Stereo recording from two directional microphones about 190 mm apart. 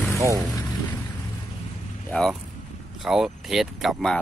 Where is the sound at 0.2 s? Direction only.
15° right (ahead or behind).